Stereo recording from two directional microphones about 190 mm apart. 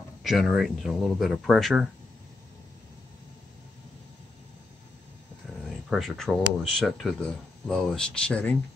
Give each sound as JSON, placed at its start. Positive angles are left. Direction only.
{"t": 0.2, "sound": "speech", "side_deg": 0}
{"t": 5.7, "sound": "speech", "side_deg": 0}